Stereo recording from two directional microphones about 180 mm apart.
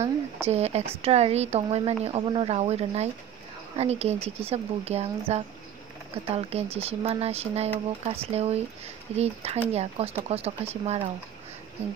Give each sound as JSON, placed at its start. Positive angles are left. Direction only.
{"t": 0.5, "sound": "speech", "side_deg": -35}